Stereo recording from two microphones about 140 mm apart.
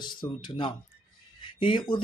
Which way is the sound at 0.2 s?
35° left (ahead or behind).